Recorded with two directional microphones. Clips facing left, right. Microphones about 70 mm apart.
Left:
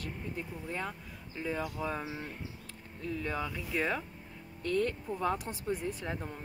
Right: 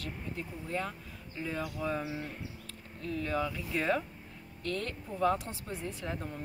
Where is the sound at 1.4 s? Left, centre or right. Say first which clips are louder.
Left 1 dB; centre.